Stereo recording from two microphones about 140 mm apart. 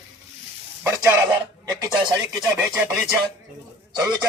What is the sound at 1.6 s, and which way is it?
Speech, 30° right (ahead or behind).